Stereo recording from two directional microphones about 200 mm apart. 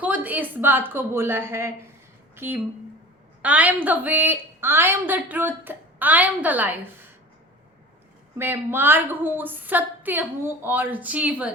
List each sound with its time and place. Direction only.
0.0 s a woman's voice: 10° right (ahead or behind)
8.4 s a woman's voice: 10° right (ahead or behind)